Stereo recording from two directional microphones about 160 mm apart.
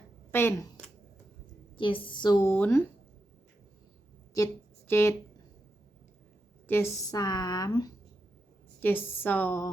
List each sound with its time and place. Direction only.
0.3 s speech: 15° left (ahead or behind)
1.7 s speech: 30° left (ahead or behind)
2.5 s a woman's voice: 15° left (ahead or behind)
4.9 s a woman's voice: 15° left (ahead or behind)
6.7 s speech: 15° left (ahead or behind)
8.8 s a woman's voice: 10° left (ahead or behind)